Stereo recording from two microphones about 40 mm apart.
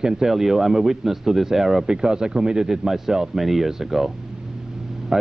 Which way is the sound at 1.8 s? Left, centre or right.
Centre.